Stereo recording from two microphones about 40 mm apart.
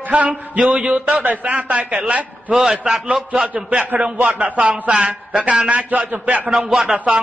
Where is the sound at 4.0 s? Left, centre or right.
Right.